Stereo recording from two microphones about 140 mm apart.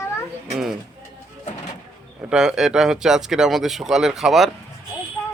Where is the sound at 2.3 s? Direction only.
5° right (ahead or behind).